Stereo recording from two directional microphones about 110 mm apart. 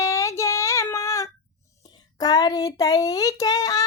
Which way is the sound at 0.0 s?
25° left (ahead or behind).